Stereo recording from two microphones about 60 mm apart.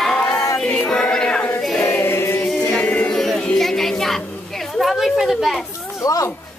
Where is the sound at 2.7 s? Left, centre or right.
Left.